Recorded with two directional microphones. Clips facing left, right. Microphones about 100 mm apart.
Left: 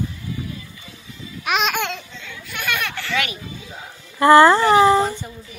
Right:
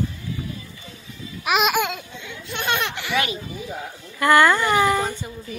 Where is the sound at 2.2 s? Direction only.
25° right (ahead or behind).